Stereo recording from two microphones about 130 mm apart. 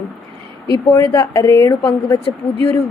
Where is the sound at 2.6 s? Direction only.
15° left (ahead or behind).